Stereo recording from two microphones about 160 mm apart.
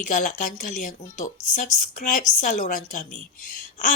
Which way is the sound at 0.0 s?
55° left (ahead or behind).